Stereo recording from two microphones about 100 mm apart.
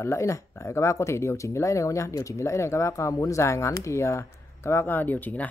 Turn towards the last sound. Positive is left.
turn(degrees=15)  # may be behind; listen again after turning